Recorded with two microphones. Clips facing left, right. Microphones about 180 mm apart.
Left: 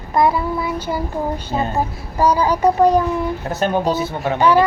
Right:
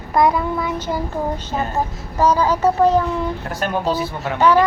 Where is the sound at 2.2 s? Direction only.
10° left (ahead or behind).